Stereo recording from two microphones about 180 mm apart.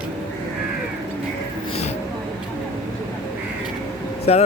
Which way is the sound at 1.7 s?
35° left (ahead or behind).